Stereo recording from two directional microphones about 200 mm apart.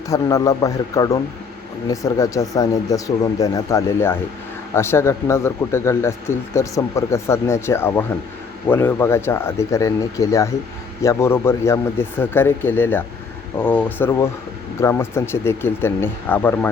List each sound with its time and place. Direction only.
0.1 s speech: 15° left (ahead or behind)